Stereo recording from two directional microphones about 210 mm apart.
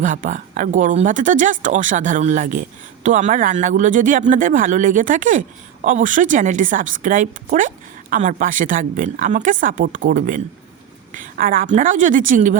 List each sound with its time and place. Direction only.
0.0 s speech: 40° right (ahead or behind)